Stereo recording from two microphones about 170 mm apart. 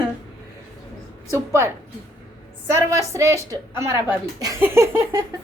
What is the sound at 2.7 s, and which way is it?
Speech, 15° right (ahead or behind).